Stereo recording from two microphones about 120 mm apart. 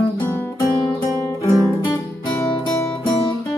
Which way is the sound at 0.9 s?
25° left (ahead or behind).